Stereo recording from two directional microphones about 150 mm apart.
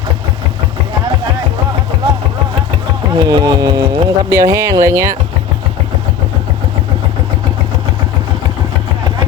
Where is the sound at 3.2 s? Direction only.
30° right (ahead or behind).